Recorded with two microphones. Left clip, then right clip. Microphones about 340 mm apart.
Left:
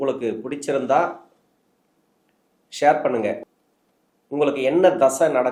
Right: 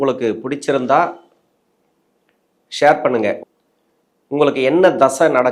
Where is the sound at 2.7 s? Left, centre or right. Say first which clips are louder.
Right 5 dB; right.